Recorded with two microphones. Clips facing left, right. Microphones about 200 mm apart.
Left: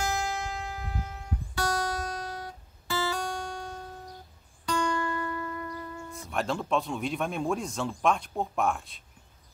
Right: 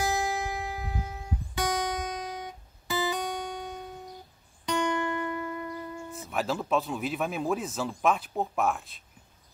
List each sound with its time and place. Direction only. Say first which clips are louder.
0.0 s music: right 2 dB; 20° right (ahead or behind)
6.1 s speech: even; 5° right (ahead or behind)